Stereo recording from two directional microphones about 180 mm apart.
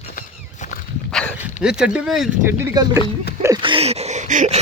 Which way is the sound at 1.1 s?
5° left (ahead or behind).